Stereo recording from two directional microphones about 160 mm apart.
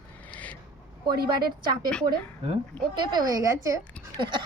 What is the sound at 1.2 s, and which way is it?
Speech, 25° right (ahead or behind).